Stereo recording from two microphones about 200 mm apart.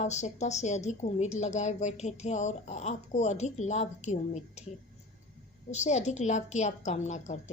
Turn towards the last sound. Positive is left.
turn(degrees=35)  # may be behind; listen again after turning